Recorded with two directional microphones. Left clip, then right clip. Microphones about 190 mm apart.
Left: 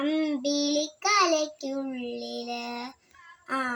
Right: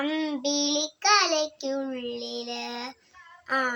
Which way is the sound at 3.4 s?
20° right (ahead or behind).